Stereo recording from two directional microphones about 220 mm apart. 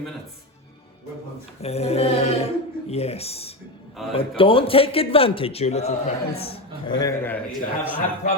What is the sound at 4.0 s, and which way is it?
Speech, centre (ahead or behind).